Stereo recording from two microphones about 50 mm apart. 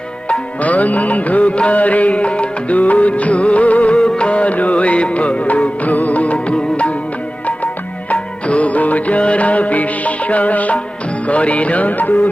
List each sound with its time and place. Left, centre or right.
0.3 s music: left
8.1 s music: left